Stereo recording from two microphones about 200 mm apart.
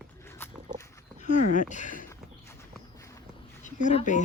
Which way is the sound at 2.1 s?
15° left (ahead or behind).